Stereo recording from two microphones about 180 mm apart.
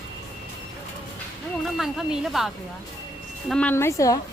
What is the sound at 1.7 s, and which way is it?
A woman's voice, centre (ahead or behind).